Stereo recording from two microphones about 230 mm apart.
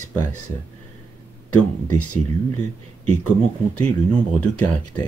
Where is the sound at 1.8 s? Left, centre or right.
Left.